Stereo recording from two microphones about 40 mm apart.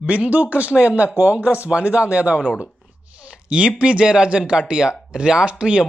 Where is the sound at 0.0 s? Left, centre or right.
Right.